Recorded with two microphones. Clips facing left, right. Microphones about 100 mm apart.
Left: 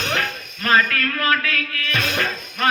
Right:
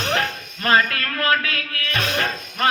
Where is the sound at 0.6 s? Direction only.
35° right (ahead or behind).